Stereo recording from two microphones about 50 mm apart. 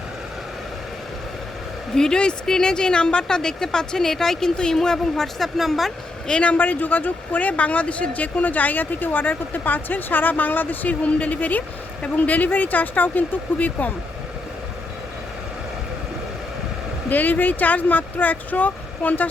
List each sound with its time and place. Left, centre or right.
2.0 s speech: centre
6.2 s a man's voice: centre
6.5 s speech: left
17.1 s speech: left